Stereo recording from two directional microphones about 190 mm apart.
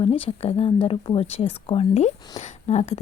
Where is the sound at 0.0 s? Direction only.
30° left (ahead or behind).